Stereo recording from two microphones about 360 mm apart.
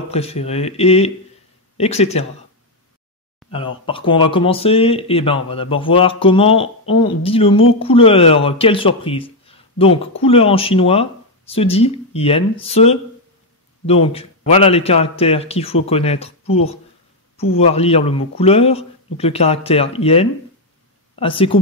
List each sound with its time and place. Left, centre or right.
0.1 s speech: centre
3.5 s speech: centre